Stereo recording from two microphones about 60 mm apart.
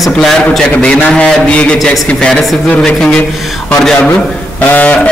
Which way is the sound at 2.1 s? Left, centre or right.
Centre.